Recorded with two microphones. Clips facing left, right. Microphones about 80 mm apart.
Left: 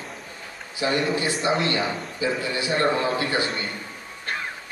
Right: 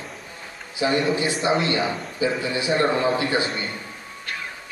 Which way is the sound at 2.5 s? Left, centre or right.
Right.